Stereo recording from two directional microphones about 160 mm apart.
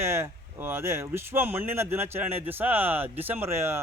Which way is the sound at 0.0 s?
15° right (ahead or behind).